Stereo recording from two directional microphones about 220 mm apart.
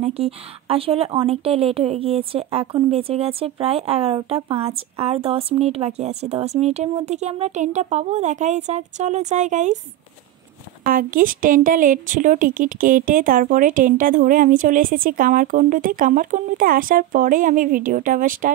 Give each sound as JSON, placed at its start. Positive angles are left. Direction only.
{"t": 0.0, "sound": "speech", "side_deg": -25}
{"t": 10.8, "sound": "speech", "side_deg": -40}